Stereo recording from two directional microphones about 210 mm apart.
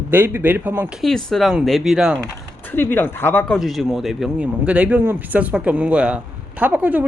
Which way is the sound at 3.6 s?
Centre (ahead or behind).